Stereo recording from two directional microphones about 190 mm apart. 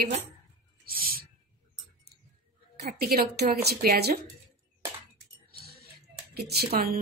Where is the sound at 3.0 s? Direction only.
55° right (ahead or behind).